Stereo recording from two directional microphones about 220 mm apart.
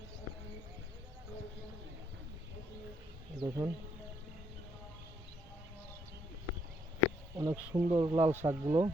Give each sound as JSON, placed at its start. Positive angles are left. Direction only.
{"t": 3.4, "sound": "speech", "side_deg": -15}
{"t": 7.3, "sound": "speech", "side_deg": -15}
{"t": 8.3, "sound": "speech", "side_deg": -10}